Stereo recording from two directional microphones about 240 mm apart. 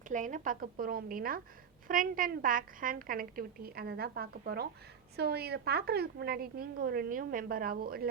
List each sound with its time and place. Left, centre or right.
0.1 s a woman's voice: right